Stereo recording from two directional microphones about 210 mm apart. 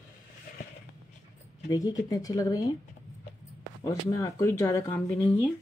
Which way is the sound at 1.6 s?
15° left (ahead or behind).